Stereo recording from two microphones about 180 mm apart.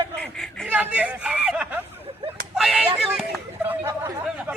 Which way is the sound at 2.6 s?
Centre (ahead or behind).